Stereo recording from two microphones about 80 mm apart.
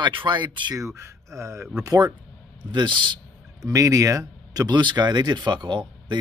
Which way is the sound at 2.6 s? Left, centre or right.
Right.